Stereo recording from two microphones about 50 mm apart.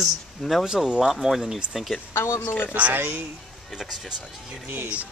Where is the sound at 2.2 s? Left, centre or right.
Left.